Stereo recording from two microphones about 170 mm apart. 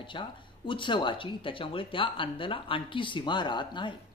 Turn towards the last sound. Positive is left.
turn(degrees=25)  # may be behind; listen again after turning